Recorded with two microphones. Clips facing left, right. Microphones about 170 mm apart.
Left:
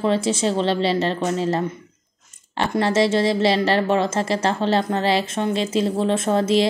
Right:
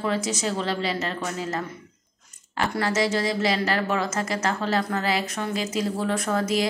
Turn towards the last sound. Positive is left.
turn(degrees=25)  # may be behind; listen again after turning